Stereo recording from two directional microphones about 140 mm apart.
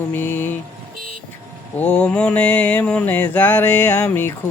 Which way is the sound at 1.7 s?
10° left (ahead or behind).